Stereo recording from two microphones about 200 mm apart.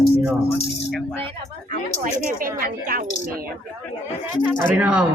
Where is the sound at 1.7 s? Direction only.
45° right (ahead or behind).